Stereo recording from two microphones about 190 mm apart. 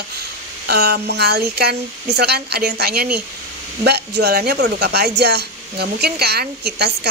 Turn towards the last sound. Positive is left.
turn(degrees=-60)  # may be behind; listen again after turning